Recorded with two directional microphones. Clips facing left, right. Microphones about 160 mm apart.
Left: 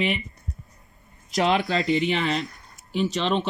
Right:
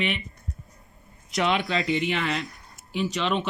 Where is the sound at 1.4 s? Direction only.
35° left (ahead or behind).